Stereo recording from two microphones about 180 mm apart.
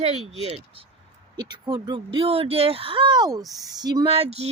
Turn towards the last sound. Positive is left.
turn(degrees=-35)  # may be behind; listen again after turning